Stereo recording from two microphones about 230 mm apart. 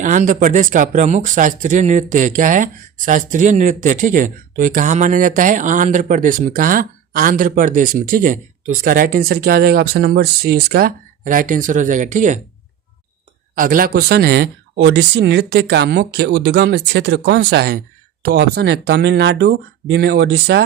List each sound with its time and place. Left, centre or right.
0.0 s speech: right
13.6 s speech: right